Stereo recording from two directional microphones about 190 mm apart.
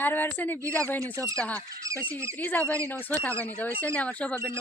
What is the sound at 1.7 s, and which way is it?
Goose, 15° right (ahead or behind).